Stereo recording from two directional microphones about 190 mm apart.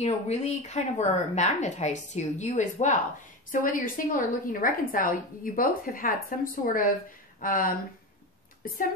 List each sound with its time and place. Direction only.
0.0 s a woman's voice: 35° left (ahead or behind)